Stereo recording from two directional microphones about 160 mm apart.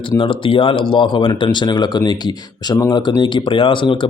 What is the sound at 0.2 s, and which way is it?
Speech, 30° left (ahead or behind).